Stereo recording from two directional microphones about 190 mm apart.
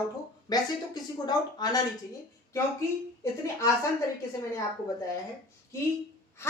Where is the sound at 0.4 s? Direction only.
20° left (ahead or behind).